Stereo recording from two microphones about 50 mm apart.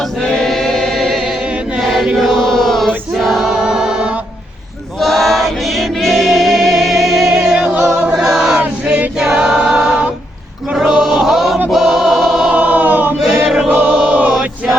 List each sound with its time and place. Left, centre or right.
0.3 s choir: centre
1.8 s chant: centre
3.5 s music: centre
4.9 s choir: centre
10.8 s music: centre
11.7 s choir: centre
12.5 s choir: right
13.1 s choir: centre
13.7 s choir: right